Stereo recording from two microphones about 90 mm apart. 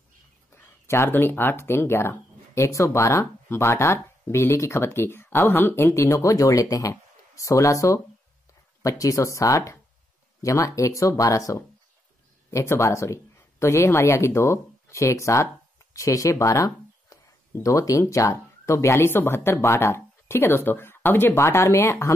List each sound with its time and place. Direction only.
0.5 s speech: 30° left (ahead or behind)